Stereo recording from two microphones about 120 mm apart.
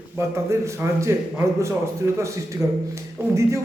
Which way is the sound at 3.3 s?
25° right (ahead or behind).